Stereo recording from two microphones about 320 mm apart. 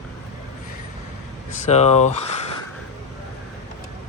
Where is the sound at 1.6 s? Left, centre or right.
Centre.